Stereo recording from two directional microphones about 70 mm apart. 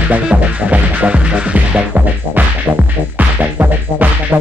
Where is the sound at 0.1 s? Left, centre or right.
Centre.